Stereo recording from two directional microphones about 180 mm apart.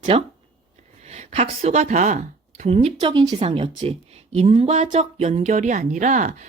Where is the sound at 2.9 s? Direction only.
25° right (ahead or behind).